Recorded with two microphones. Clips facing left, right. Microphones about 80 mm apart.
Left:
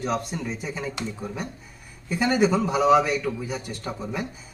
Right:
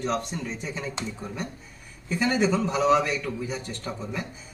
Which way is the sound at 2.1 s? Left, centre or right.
Centre.